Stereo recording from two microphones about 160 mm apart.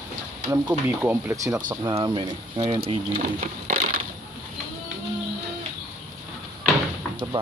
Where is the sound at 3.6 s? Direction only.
55° right (ahead or behind).